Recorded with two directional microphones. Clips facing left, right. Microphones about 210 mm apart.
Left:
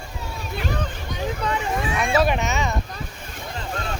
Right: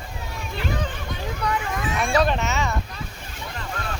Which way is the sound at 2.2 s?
15° left (ahead or behind).